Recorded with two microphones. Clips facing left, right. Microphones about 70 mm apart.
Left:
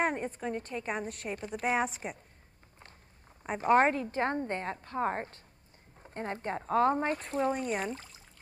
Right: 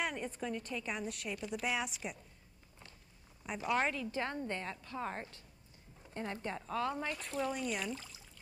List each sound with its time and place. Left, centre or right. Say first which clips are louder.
0.0 s speech: left 7 dB; left
3.4 s speech: left 9 dB; left